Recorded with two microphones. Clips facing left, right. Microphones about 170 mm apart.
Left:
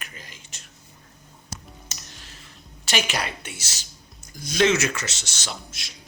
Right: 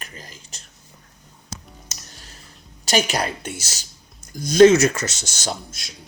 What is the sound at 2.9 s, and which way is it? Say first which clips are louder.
Speech: right 6 dB; 40° right (ahead or behind).